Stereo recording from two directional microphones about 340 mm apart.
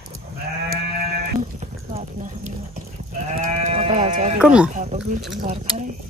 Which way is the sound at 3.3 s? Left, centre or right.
Centre.